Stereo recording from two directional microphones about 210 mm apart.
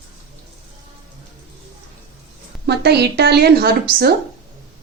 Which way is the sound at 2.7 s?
50° right (ahead or behind).